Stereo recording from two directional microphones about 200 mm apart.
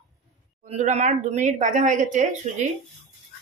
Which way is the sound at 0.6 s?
35° right (ahead or behind).